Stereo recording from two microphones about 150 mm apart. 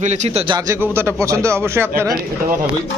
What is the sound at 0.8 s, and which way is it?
Speech, 15° right (ahead or behind).